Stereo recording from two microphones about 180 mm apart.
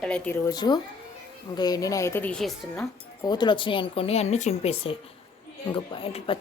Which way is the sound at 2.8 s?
25° left (ahead or behind).